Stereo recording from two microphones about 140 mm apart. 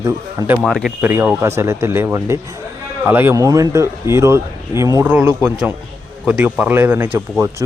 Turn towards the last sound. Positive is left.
turn(degrees=-15)  # may be behind; listen again after turning